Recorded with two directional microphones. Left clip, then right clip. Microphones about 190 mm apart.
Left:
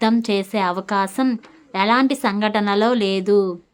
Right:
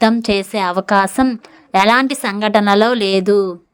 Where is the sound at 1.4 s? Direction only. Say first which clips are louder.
Right 8 dB; 35° right (ahead or behind).